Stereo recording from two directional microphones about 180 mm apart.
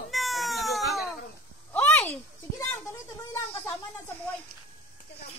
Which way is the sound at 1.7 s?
10° left (ahead or behind).